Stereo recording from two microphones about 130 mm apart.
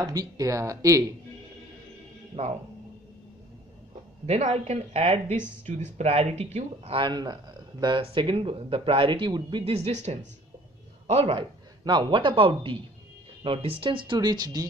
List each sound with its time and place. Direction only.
0.0 s speech: 30° right (ahead or behind)
2.3 s speech: 55° right (ahead or behind)
4.3 s speech: 65° right (ahead or behind)
5.9 s speech: 50° right (ahead or behind)
7.1 s speech: 35° right (ahead or behind)
9.8 s speech: 60° right (ahead or behind)
11.8 s speech: 35° right (ahead or behind)